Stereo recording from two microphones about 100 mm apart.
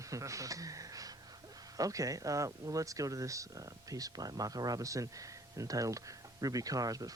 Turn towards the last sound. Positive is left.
turn(degrees=-35)  # may be behind; listen again after turning